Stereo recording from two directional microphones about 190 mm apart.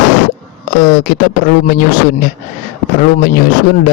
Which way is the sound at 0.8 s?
45° left (ahead or behind).